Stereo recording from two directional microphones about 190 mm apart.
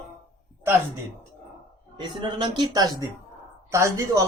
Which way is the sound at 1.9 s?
25° right (ahead or behind).